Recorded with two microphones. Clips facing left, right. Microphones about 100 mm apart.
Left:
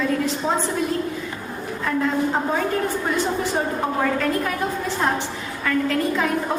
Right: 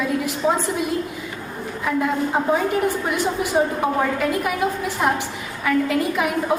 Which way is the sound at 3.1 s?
15° right (ahead or behind).